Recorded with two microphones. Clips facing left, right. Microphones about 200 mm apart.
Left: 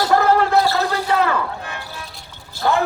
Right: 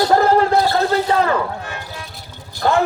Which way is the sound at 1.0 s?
35° right (ahead or behind).